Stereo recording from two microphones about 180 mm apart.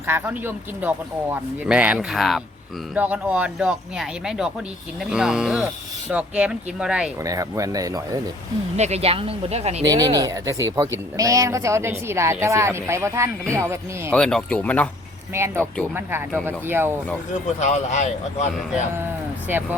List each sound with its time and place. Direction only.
0.0 s speech: 10° right (ahead or behind)
7.2 s speech: 20° right (ahead or behind)
8.7 s speech: 35° right (ahead or behind)
9.8 s speech: 20° right (ahead or behind)
14.1 s speech: 5° left (ahead or behind)
15.3 s speech: 15° right (ahead or behind)
17.6 s speech: 40° left (ahead or behind)
19.5 s speech: 10° right (ahead or behind)